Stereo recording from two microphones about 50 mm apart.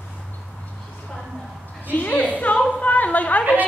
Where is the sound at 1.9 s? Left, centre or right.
Left.